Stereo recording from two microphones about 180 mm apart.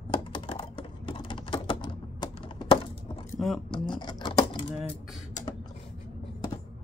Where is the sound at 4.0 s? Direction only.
25° left (ahead or behind).